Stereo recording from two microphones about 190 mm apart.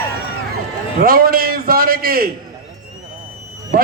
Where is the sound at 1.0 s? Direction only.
50° right (ahead or behind).